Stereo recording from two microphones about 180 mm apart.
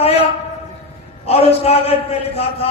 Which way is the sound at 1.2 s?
35° left (ahead or behind).